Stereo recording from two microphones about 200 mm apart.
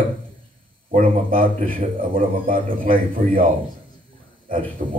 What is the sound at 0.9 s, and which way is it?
A man's voice, 45° right (ahead or behind).